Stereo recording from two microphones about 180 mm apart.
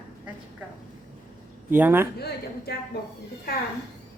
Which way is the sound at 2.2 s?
60° left (ahead or behind).